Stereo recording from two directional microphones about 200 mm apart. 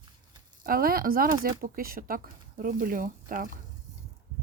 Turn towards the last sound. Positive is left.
turn(degrees=-45)  # may be behind; listen again after turning